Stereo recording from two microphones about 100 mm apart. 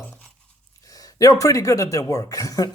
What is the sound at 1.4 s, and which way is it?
Speech, 35° left (ahead or behind).